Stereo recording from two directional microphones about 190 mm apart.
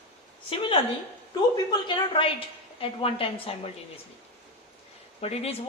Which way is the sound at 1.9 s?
25° left (ahead or behind).